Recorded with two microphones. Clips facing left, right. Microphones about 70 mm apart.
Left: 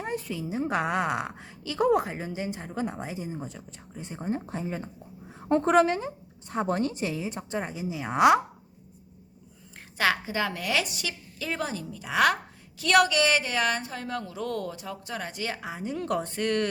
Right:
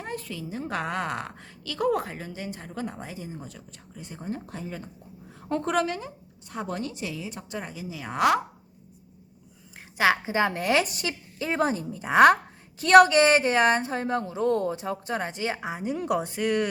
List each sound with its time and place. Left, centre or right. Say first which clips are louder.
0.0 s a woman's voice: left 3 dB; centre
10.0 s a woman's voice: right 4 dB; right